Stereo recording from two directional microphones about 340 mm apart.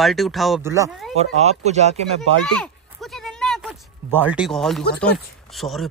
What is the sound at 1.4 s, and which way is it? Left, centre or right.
Speech, centre.